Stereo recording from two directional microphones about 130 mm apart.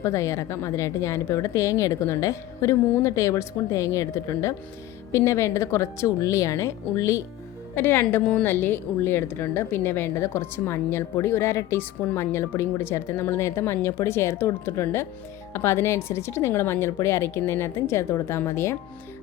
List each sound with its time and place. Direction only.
0.0 s a woman's voice: 25° left (ahead or behind)